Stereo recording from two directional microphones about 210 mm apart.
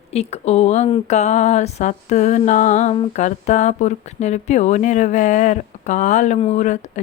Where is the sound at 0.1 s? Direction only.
30° left (ahead or behind).